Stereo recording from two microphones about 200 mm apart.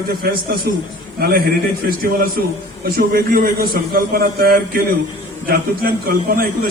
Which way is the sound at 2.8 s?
50° right (ahead or behind).